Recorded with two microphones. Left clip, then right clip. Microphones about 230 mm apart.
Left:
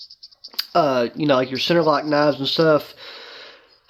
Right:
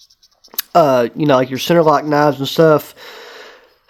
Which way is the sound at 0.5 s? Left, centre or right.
Right.